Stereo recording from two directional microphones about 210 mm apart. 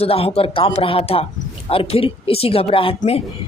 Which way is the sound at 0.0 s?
30° left (ahead or behind).